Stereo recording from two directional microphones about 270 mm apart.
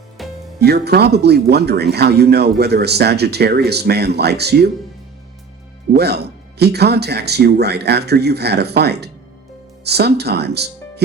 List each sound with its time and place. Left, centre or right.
0.2 s music: centre
0.6 s speech: right
6.0 s speech: right